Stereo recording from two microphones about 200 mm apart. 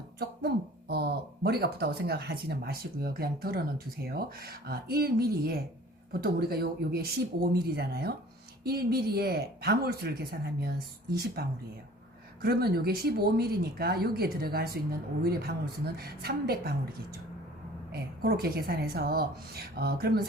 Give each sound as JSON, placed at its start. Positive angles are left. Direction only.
{"t": 0.2, "sound": "speech", "side_deg": -50}
{"t": 18.2, "sound": "speech", "side_deg": -50}